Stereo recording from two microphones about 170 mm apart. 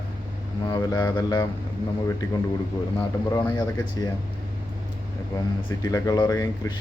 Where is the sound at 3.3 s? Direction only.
10° left (ahead or behind).